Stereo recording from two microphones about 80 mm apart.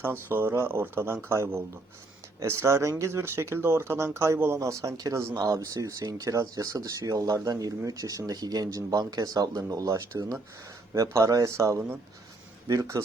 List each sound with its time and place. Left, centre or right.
0.0 s speech: right
4.9 s speech: right